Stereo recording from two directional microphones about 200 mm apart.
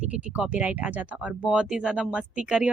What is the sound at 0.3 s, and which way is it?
Speech, 5° right (ahead or behind).